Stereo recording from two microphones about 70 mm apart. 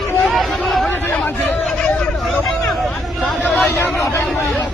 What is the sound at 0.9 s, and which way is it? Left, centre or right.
Chatter, left.